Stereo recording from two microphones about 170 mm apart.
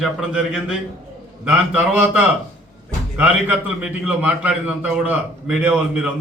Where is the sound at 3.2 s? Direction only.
10° right (ahead or behind).